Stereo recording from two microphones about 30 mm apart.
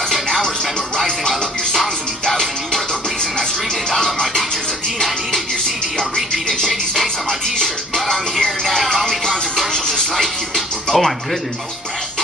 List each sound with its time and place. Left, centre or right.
0.9 s music: centre
5.9 s music: centre
9.6 s music: centre